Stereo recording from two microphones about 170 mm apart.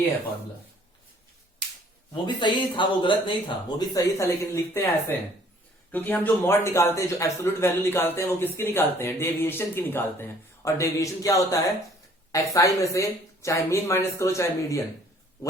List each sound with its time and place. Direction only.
2.2 s speech: 25° left (ahead or behind)